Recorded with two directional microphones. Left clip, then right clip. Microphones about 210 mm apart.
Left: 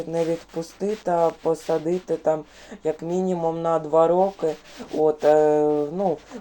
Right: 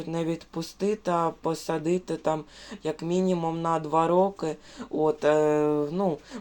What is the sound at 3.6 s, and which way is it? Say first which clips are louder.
Speech: left 7 dB; 20° right (ahead or behind).